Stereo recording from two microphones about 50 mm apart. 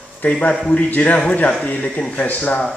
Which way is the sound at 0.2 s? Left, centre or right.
Left.